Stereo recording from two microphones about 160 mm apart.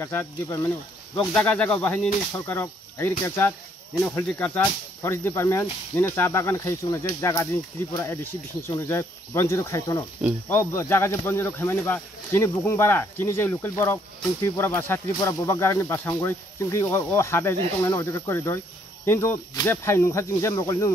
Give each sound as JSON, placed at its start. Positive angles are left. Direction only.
{"t": 0.0, "sound": "speech", "side_deg": 15}